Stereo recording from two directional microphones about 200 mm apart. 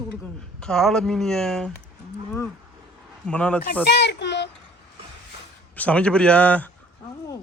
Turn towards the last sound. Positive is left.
turn(degrees=5)  # may be behind; listen again after turning